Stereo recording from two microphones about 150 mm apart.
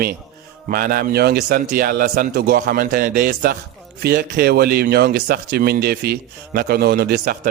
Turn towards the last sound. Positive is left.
turn(degrees=-90)